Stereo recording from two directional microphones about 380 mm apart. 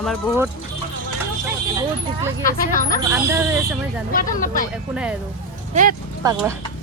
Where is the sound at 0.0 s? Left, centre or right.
Centre.